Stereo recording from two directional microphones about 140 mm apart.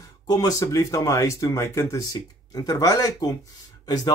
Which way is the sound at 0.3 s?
25° left (ahead or behind).